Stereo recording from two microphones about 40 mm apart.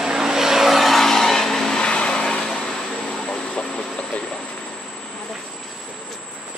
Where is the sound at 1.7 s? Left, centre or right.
Left.